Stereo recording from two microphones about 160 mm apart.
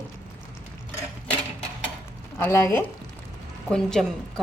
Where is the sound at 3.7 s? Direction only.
5° left (ahead or behind).